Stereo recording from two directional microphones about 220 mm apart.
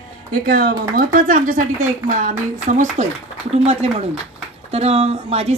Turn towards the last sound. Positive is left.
turn(degrees=-30)  # may be behind; listen again after turning